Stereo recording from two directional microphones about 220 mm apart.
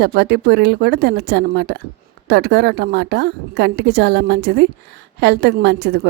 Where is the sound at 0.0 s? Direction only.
45° right (ahead or behind).